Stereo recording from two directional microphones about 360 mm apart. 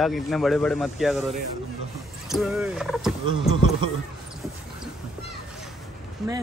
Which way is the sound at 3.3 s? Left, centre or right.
Left.